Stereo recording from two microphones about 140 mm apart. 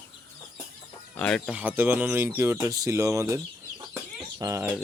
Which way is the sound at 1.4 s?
10° right (ahead or behind).